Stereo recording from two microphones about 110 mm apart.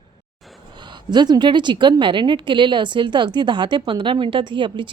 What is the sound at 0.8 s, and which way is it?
A woman's voice, 45° right (ahead or behind).